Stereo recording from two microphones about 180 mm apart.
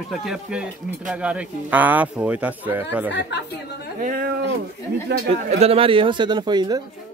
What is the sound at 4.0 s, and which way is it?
Speech, 55° right (ahead or behind).